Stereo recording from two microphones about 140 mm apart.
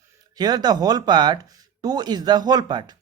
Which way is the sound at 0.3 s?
30° right (ahead or behind).